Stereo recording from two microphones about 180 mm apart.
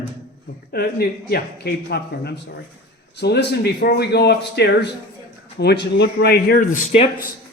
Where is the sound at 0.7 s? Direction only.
60° left (ahead or behind).